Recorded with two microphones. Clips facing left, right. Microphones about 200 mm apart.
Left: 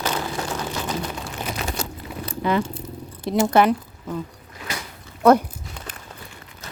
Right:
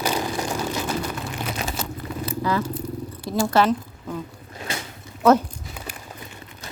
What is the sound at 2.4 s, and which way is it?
Speech, 20° left (ahead or behind).